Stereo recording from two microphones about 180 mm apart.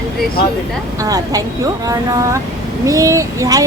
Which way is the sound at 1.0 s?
20° right (ahead or behind).